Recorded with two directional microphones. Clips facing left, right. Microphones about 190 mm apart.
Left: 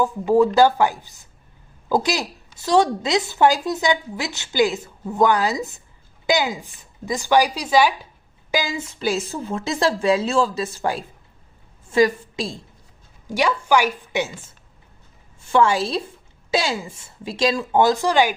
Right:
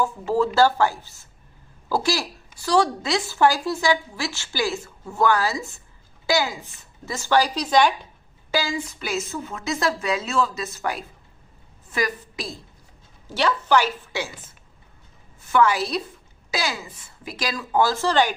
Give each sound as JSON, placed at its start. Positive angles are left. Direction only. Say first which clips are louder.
{"t": 0.0, "sound": "a woman's voice", "louder": "left 5 dB", "side_deg": 15}
{"t": 13.2, "sound": "a woman's voice", "louder": "left 2 dB", "side_deg": 10}